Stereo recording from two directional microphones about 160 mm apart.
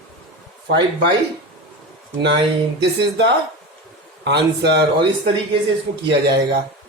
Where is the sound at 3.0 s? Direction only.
90° right.